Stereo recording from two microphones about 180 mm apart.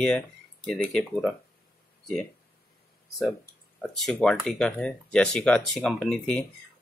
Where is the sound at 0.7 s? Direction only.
Centre (ahead or behind).